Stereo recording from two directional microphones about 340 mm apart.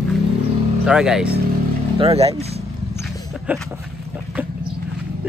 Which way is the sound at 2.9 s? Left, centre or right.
Centre.